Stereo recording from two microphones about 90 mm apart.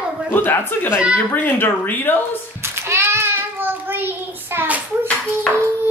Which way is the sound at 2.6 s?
30° right (ahead or behind).